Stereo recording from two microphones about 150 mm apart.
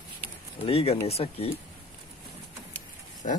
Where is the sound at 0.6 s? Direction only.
40° left (ahead or behind).